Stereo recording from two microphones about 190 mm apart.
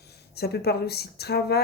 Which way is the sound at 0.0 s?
55° left (ahead or behind).